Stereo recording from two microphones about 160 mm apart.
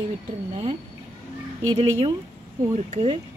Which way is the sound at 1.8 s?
35° right (ahead or behind).